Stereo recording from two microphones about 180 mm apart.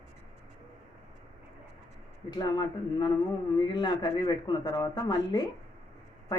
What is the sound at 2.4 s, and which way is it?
Speech, 25° left (ahead or behind).